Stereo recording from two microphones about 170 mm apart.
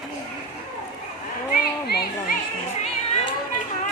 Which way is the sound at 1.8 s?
70° left (ahead or behind).